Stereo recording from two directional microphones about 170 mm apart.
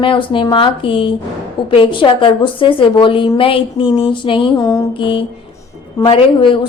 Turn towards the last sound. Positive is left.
turn(degrees=30)  # may be behind; listen again after turning